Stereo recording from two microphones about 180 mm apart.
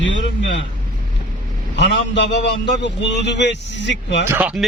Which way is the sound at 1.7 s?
75° left (ahead or behind).